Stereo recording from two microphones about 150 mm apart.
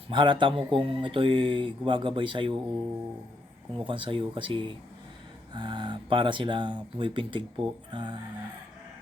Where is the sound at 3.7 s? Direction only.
35° right (ahead or behind).